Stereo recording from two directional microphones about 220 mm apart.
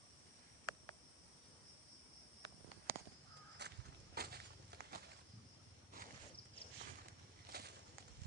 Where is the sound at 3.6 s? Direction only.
50° right (ahead or behind).